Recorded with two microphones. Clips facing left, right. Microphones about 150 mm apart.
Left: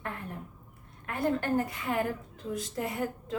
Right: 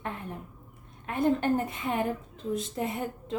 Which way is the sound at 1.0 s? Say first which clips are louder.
Right 4 dB; 20° right (ahead or behind).